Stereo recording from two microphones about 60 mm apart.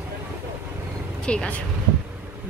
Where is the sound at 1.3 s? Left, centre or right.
Centre.